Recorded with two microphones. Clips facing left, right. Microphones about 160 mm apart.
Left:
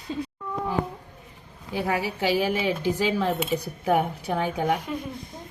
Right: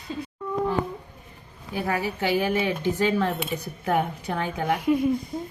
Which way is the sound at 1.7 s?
15° left (ahead or behind).